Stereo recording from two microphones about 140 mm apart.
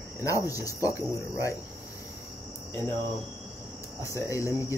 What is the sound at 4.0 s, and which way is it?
Cricket, 20° left (ahead or behind).